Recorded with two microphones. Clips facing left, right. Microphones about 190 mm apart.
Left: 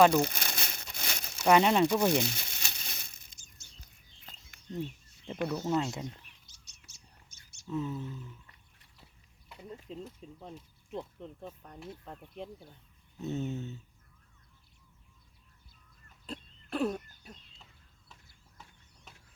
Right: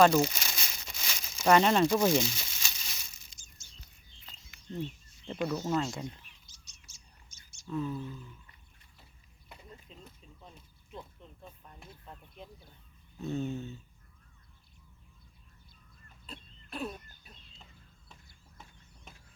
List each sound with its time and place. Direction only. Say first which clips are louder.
0.2 s crumpling: right 1 dB; 55° left (ahead or behind)
1.5 s speech: even; 15° left (ahead or behind)
2.1 s crumpling: right 1 dB; 60° left (ahead or behind)
3.6 s chirp: left 1 dB; 65° left (ahead or behind)
4.8 s speech: even; 5° left (ahead or behind)
5.6 s speech: left 1 dB; 20° left (ahead or behind)
7.7 s speech: even; 20° left (ahead or behind)
9.7 s speech: left 10 dB; 80° left
12.0 s speech: left 6 dB; 60° left (ahead or behind)
13.1 s speech: right 1 dB; 20° left (ahead or behind)
16.2 s chicken: left 7 dB; 75° left (ahead or behind)